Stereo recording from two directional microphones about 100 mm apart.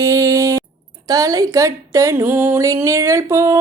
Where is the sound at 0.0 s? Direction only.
35° right (ahead or behind).